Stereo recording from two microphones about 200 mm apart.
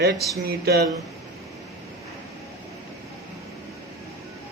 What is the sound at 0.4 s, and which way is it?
Speech, 50° right (ahead or behind).